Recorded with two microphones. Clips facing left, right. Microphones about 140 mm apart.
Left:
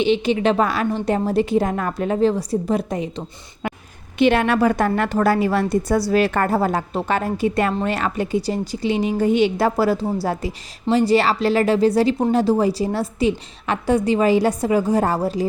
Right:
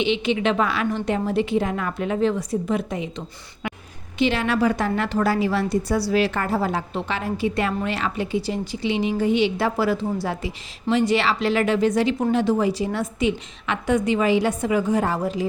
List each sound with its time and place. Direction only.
0.0 s a woman's voice: 40° left (ahead or behind)
4.2 s a woman's voice: 55° left (ahead or behind); by 15.4 s 40° left (ahead or behind)